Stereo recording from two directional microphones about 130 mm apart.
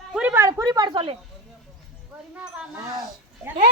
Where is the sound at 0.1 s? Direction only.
10° right (ahead or behind).